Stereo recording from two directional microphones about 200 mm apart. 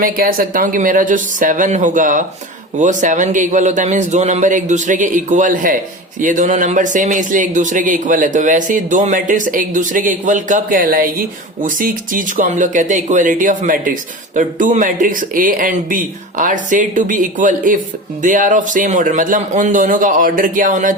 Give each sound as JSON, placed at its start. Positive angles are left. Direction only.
{"t": 0.0, "sound": "speech", "side_deg": -45}